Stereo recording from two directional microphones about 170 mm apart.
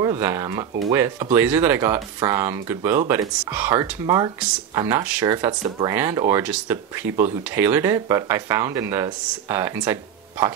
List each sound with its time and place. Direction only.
0.0 s speech: 15° right (ahead or behind)